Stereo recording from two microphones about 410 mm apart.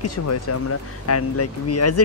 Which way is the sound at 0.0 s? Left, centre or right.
Left.